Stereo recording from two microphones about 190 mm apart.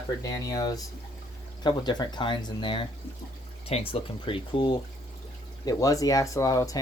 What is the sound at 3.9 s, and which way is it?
Speech, 30° left (ahead or behind).